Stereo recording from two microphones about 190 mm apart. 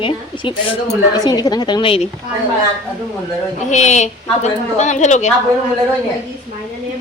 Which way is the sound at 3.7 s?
40° left (ahead or behind).